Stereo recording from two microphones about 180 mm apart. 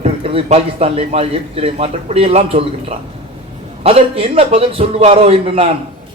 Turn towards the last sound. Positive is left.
turn(degrees=-35)  # may be behind; listen again after turning